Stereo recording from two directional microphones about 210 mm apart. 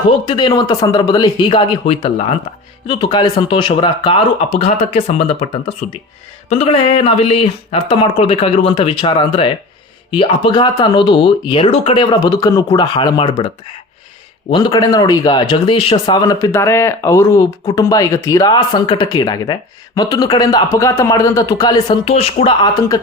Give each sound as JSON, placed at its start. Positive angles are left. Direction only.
{"t": 0.3, "sound": "speech", "side_deg": 20}
{"t": 14.5, "sound": "speech", "side_deg": 20}